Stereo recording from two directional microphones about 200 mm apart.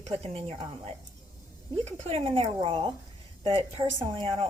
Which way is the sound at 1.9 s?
30° right (ahead or behind).